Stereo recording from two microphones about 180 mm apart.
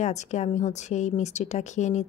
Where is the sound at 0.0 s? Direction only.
40° left (ahead or behind).